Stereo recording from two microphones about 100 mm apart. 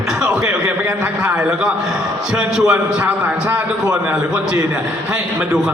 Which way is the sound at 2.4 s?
10° right (ahead or behind).